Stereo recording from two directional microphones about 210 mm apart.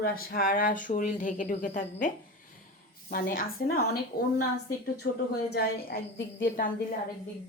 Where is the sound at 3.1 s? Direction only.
45° left (ahead or behind).